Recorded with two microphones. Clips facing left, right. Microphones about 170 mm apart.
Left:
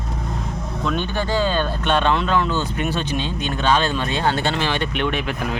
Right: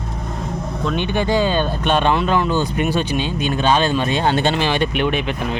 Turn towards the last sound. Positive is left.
turn(degrees=5)  # may be behind; listen again after turning